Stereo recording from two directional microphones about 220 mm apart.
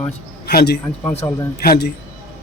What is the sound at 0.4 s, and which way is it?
Speech, 45° left (ahead or behind).